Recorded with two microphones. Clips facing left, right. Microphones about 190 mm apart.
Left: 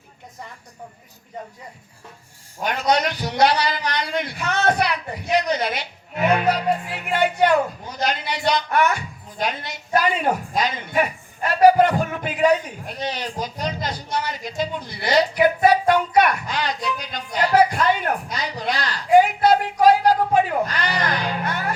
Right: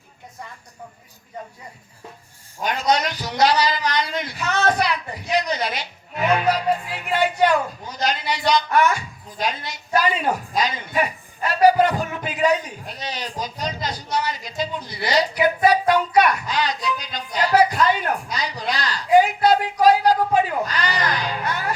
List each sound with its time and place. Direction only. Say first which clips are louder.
2.6 s a man's voice: left 1 dB; 60° left (ahead or behind)